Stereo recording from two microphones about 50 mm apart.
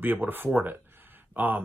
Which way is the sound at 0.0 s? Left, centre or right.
Right.